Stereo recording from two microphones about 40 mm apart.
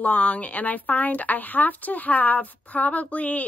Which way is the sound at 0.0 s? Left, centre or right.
Left.